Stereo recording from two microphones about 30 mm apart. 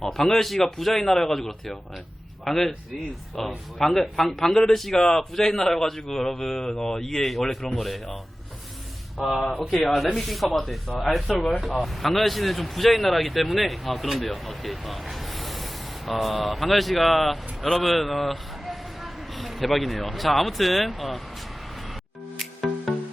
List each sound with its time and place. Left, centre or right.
0.3 s a man's voice: centre
5.7 s a man's voice: centre
22.4 s music: centre